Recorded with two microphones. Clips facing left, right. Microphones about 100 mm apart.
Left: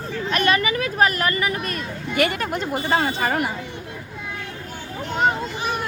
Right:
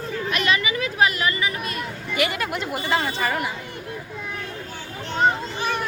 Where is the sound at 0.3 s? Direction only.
45° left (ahead or behind).